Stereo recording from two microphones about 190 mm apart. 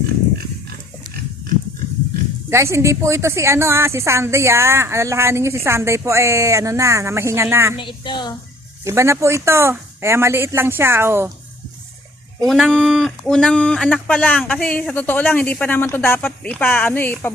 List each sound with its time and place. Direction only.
2.5 s speech: 15° right (ahead or behind)
7.8 s a woman's voice: 25° left (ahead or behind)
8.8 s speech: 15° right (ahead or behind)
12.4 s speech: centre (ahead or behind)